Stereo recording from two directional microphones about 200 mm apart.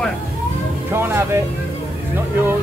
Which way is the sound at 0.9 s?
10° right (ahead or behind).